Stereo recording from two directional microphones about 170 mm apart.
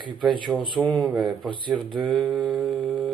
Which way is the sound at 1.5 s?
30° right (ahead or behind).